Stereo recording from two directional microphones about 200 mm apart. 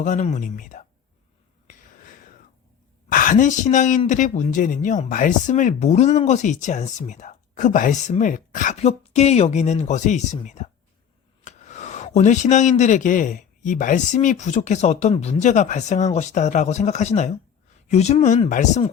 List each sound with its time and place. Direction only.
0.0 s speech: 40° left (ahead or behind)
3.1 s speech: 45° left (ahead or behind)